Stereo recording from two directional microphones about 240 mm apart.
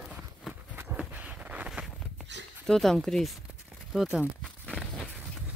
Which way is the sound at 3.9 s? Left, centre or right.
Centre.